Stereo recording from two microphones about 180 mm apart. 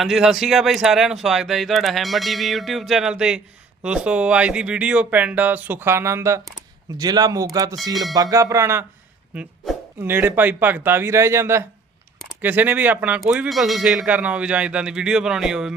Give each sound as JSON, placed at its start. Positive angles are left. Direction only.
{"t": 0.0, "sound": "speech", "side_deg": 0}